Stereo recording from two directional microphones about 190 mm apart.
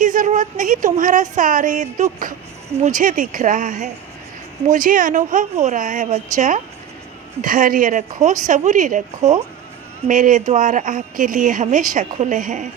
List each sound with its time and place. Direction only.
0.0 s a woman's voice: 45° right (ahead or behind)